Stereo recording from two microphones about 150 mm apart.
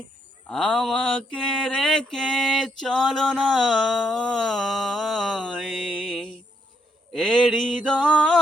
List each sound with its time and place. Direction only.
0.5 s mantra: centre (ahead or behind)